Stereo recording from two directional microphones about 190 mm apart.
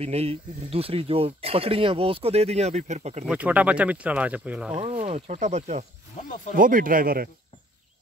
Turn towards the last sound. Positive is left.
turn(degrees=-50)  # may be behind; listen again after turning